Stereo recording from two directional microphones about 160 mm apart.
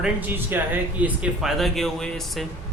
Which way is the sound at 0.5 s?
15° right (ahead or behind).